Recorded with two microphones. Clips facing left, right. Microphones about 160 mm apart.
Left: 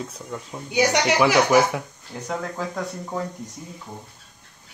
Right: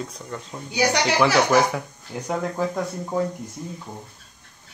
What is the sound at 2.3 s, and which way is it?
Speech, 15° right (ahead or behind).